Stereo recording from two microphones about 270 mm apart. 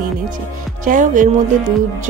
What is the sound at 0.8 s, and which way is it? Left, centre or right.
Speech, right.